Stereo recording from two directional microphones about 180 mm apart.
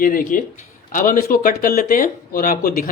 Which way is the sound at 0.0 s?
50° left (ahead or behind).